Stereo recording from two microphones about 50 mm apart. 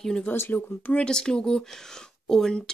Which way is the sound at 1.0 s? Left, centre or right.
Centre.